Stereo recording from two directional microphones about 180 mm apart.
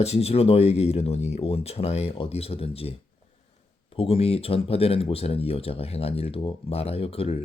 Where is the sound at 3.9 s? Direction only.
30° left (ahead or behind).